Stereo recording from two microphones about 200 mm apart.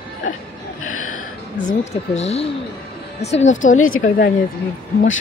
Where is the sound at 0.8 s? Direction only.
90° left.